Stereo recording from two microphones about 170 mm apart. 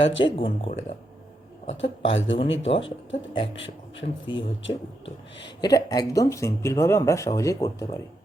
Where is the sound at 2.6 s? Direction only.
35° left (ahead or behind).